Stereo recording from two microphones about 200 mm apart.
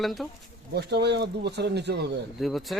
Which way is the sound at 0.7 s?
55° right (ahead or behind).